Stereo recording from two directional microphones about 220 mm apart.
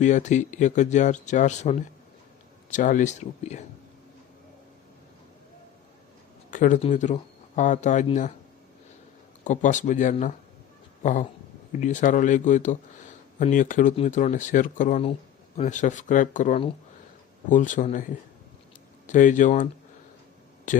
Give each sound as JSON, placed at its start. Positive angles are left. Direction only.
{"t": 0.0, "sound": "speech", "side_deg": 35}
{"t": 6.5, "sound": "speech", "side_deg": 35}
{"t": 9.4, "sound": "speech", "side_deg": 35}
{"t": 20.7, "sound": "speech", "side_deg": 35}